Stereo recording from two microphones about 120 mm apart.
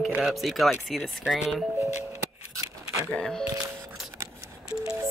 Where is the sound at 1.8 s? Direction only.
20° right (ahead or behind).